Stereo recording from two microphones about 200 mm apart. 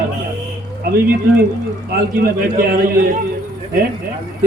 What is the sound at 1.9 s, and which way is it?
A man's voice, 50° right (ahead or behind).